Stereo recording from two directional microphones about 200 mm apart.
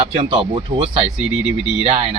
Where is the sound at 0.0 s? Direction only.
30° right (ahead or behind).